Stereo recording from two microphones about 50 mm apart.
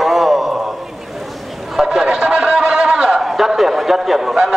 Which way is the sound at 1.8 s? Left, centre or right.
Centre.